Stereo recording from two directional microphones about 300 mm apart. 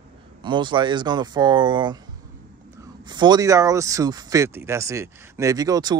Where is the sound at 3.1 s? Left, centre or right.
Centre.